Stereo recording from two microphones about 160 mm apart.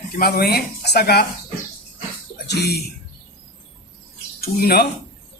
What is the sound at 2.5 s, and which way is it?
Speech, 85° left.